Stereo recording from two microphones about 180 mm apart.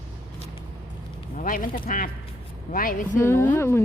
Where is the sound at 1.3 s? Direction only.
50° left (ahead or behind).